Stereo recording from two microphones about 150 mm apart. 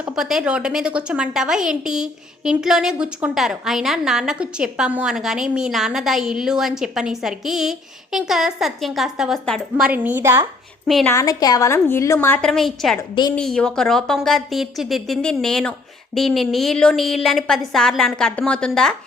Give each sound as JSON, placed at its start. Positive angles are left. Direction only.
{"t": 0.2, "sound": "a woman's voice", "side_deg": -5}
{"t": 10.8, "sound": "a woman's voice", "side_deg": 0}
{"t": 11.1, "sound": "a woman's voice", "side_deg": 25}
{"t": 12.4, "sound": "a woman's voice", "side_deg": 0}